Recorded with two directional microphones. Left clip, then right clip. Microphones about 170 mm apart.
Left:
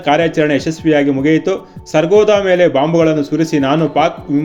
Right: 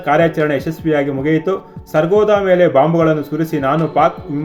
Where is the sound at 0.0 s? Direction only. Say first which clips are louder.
Even; 50° left (ahead or behind).